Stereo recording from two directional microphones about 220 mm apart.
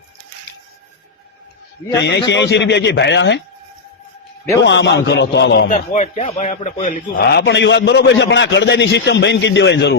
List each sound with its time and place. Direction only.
2.0 s a man's voice: 50° left (ahead or behind)
4.6 s a man's voice: 55° left (ahead or behind); by 6.2 s 35° left (ahead or behind)
6.2 s speech: 25° left (ahead or behind)
6.5 s a man's voice: 35° left (ahead or behind); by 9.9 s 50° left (ahead or behind)